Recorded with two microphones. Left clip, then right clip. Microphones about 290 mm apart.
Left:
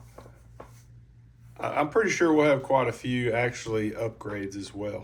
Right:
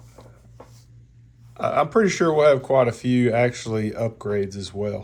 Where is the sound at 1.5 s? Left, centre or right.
Centre.